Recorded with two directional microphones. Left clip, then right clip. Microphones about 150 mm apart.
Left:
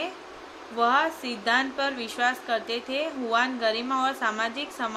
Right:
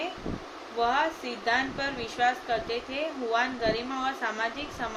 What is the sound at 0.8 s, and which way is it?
A woman's voice, 50° left (ahead or behind).